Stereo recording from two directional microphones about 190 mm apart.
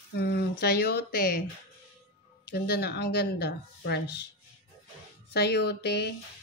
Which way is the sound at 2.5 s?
55° left (ahead or behind).